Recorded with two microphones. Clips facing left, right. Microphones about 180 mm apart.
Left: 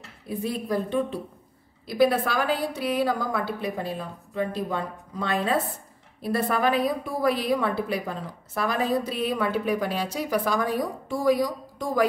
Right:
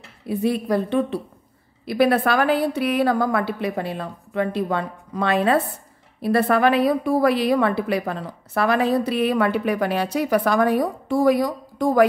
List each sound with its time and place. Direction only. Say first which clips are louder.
0.3 s a woman's voice: right 6 dB; 70° right (ahead or behind)